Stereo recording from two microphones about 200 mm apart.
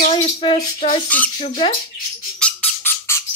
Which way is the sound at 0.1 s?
25° left (ahead or behind).